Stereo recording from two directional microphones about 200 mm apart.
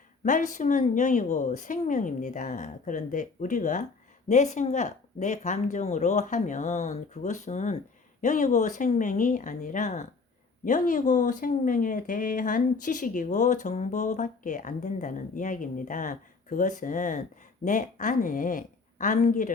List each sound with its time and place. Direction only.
0.3 s speech: 40° left (ahead or behind)